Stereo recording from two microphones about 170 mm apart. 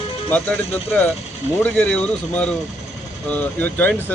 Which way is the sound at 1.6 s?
5° left (ahead or behind).